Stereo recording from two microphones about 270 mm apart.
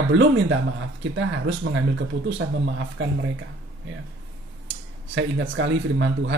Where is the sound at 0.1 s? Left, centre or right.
Right.